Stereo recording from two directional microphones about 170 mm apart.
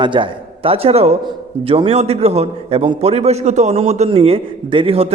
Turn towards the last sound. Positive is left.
turn(degrees=-35)  # may be behind; listen again after turning